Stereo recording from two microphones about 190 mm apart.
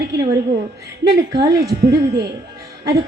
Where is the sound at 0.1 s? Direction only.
65° right (ahead or behind).